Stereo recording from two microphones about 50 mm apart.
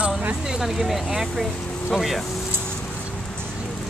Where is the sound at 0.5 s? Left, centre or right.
Centre.